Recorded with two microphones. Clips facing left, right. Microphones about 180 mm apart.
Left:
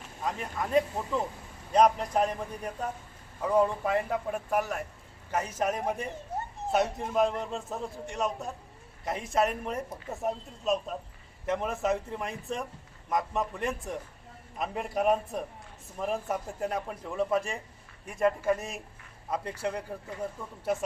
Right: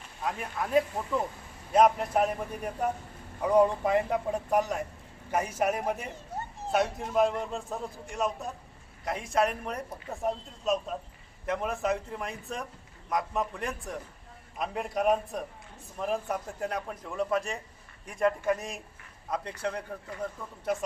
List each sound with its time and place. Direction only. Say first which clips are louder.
0.0 s speech: even; centre (ahead or behind)